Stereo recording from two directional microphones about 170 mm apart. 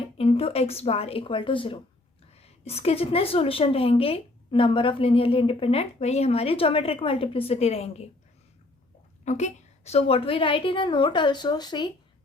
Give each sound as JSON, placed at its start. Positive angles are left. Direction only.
{"t": 0.2, "sound": "a woman's voice", "side_deg": 35}
{"t": 9.2, "sound": "a woman's voice", "side_deg": 45}